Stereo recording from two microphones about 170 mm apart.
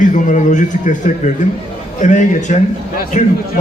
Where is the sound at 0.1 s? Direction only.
45° left (ahead or behind).